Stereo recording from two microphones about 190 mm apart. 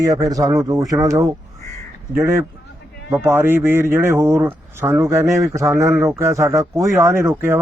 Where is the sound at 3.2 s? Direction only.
10° right (ahead or behind).